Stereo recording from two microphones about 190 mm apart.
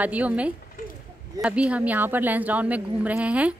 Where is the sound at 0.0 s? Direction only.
10° right (ahead or behind).